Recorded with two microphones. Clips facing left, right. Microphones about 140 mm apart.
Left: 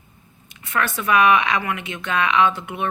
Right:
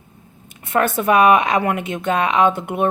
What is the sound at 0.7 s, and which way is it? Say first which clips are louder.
A woman's voice: right 5 dB; 50° right (ahead or behind).